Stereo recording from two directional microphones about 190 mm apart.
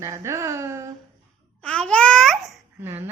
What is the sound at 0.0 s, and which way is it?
Speech, 15° right (ahead or behind).